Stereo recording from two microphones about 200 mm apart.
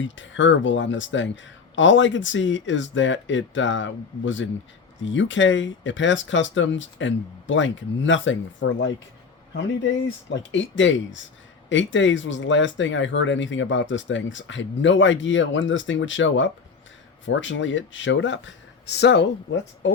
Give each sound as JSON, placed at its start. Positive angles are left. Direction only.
{"t": 0.0, "sound": "speech", "side_deg": 70}
{"t": 10.2, "sound": "speech", "side_deg": 70}